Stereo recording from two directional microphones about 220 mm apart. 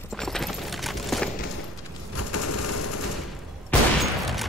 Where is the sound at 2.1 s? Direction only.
90° left.